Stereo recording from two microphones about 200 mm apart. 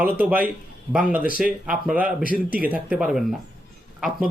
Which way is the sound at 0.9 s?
5° right (ahead or behind).